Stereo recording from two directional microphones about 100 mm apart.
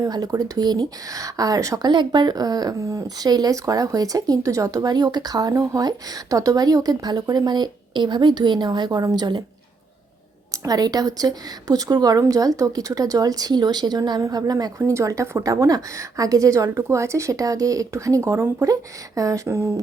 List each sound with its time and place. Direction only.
0.0 s speech: 40° right (ahead or behind)
1.9 s speech: 50° right (ahead or behind)
10.5 s speech: 35° right (ahead or behind)
14.8 s speech: 30° right (ahead or behind)